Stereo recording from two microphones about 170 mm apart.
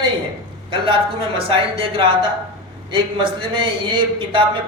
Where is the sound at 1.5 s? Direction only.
30° right (ahead or behind).